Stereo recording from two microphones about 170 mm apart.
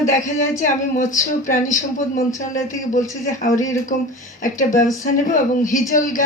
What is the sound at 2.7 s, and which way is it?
Speech, 50° left (ahead or behind).